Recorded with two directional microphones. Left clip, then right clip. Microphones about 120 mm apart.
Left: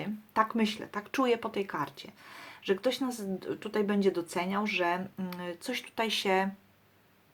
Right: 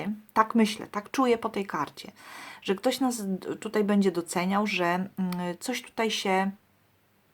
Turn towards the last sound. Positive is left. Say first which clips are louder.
# right 2 dB
turn(degrees=-30)  # may be behind; listen again after turning